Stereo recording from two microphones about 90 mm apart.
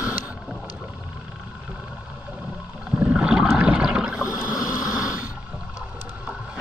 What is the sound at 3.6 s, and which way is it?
Water, 10° right (ahead or behind).